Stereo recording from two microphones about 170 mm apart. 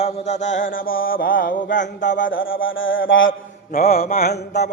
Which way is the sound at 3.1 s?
90° left.